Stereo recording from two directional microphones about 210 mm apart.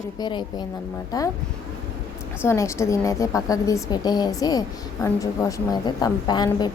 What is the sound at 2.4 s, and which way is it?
A woman's voice, 15° left (ahead or behind).